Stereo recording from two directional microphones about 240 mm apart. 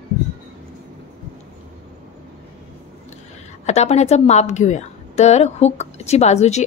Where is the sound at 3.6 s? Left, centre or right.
Left.